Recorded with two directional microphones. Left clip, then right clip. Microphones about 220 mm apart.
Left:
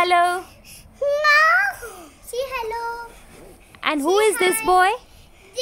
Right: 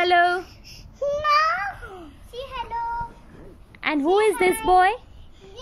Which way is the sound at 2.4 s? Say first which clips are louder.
Left 6 dB; 20° left (ahead or behind).